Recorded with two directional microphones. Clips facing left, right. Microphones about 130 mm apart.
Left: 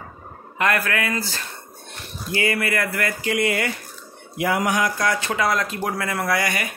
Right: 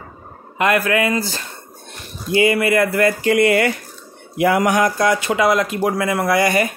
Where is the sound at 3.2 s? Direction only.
60° right (ahead or behind).